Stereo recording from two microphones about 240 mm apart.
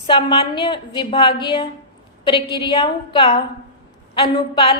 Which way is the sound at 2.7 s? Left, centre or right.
Centre.